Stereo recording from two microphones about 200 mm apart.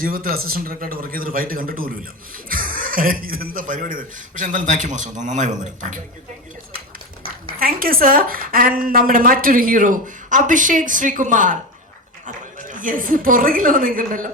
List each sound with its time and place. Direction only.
0.0 s a woman's voice: 45° right (ahead or behind)
7.6 s a woman's voice: 45° right (ahead or behind)
12.7 s a woman's voice: 40° right (ahead or behind)